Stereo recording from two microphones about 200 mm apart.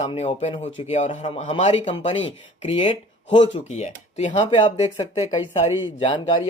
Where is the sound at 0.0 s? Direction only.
30° left (ahead or behind).